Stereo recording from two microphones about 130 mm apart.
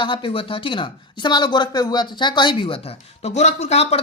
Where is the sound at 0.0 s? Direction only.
40° left (ahead or behind).